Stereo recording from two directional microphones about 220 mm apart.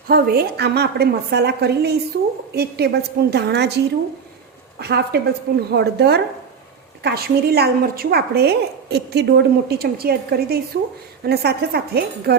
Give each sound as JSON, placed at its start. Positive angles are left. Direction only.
{"t": 0.1, "sound": "a woman's voice", "side_deg": -45}
{"t": 4.8, "sound": "a woman's voice", "side_deg": -45}